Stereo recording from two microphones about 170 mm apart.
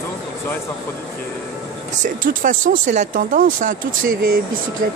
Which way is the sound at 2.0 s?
50° right (ahead or behind).